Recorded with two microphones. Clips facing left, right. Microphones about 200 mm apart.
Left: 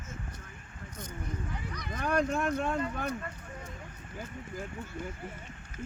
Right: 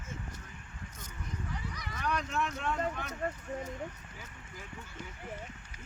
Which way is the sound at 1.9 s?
50° left (ahead or behind).